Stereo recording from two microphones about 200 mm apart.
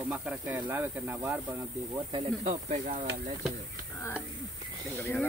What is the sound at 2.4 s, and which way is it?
Speech, 35° right (ahead or behind).